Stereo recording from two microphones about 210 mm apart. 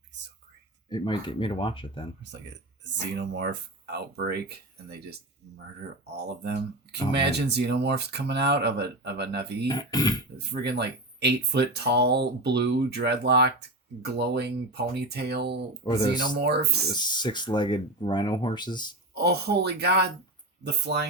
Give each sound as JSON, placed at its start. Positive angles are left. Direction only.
{"t": 0.9, "sound": "speech", "side_deg": 20}
{"t": 2.8, "sound": "speech", "side_deg": -55}
{"t": 9.6, "sound": "speech", "side_deg": 20}
{"t": 10.3, "sound": "speech", "side_deg": -50}
{"t": 15.8, "sound": "speech", "side_deg": 20}
{"t": 16.3, "sound": "speech", "side_deg": -50}
{"t": 16.9, "sound": "speech", "side_deg": 20}
{"t": 19.1, "sound": "speech", "side_deg": -50}